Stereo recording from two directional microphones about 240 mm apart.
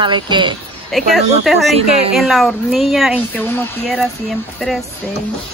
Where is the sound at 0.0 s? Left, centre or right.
Centre.